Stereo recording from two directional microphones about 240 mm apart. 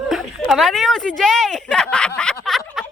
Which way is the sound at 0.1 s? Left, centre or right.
Centre.